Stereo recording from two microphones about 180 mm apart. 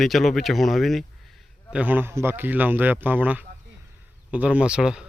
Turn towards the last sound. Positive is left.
turn(degrees=-5)  # may be behind; listen again after turning